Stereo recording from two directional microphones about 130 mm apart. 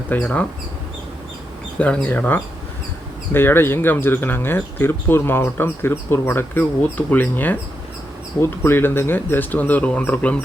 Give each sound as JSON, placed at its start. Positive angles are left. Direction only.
{"t": 0.1, "sound": "speech", "side_deg": 10}
{"t": 1.8, "sound": "speech", "side_deg": 10}